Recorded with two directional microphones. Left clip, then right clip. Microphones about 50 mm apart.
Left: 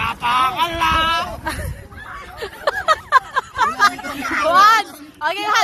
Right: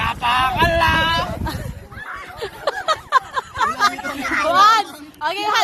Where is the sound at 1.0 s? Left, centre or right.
Centre.